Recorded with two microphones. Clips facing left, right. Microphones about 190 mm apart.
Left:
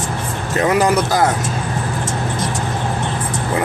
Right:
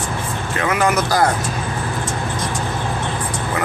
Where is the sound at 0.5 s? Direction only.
35° left (ahead or behind).